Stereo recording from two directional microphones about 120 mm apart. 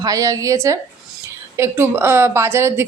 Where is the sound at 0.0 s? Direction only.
30° right (ahead or behind).